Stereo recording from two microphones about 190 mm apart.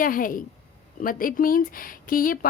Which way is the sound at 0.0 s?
45° left (ahead or behind).